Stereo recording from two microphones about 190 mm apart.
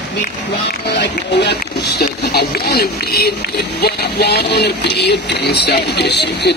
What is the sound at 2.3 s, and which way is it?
Speech, 55° left (ahead or behind).